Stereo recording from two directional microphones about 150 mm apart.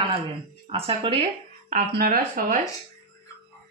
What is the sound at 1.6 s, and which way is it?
Speech, 70° right (ahead or behind).